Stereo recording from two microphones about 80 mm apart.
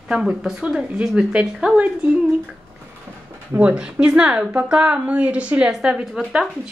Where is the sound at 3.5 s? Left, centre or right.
Centre.